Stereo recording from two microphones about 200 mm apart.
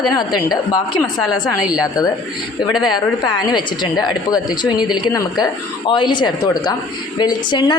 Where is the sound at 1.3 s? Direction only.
5° right (ahead or behind).